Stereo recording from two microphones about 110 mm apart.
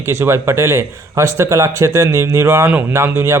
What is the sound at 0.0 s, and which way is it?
A man's voice, 25° right (ahead or behind).